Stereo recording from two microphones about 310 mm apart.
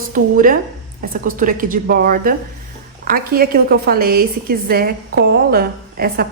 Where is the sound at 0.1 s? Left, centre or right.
Right.